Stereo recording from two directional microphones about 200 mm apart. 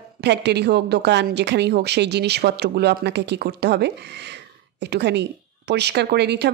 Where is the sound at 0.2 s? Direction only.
55° right (ahead or behind).